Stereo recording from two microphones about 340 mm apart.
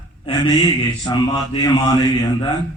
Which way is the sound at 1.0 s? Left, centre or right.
Centre.